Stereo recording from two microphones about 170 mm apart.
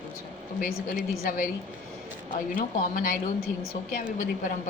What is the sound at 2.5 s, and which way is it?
Speech, 55° left (ahead or behind).